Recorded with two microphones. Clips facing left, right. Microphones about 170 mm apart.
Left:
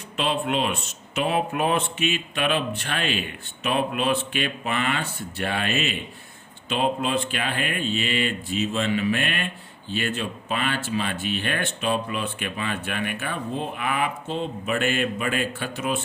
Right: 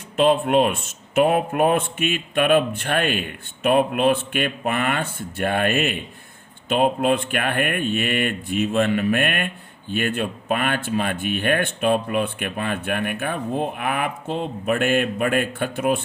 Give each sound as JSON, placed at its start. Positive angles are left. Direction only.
{"t": 0.2, "sound": "a man's voice", "side_deg": -50}